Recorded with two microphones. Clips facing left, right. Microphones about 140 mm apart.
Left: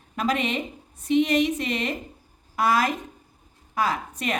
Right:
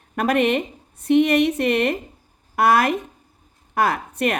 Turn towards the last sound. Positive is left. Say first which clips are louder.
# right 5 dB
turn(degrees=-60)  # may be behind; listen again after turning